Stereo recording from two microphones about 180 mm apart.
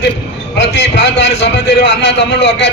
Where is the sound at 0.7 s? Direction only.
75° left (ahead or behind).